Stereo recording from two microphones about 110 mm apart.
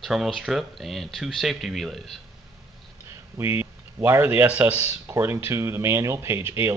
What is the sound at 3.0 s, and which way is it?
Speech, 25° right (ahead or behind).